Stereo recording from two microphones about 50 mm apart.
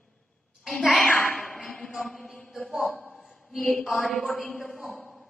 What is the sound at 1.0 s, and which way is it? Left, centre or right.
Speech, left.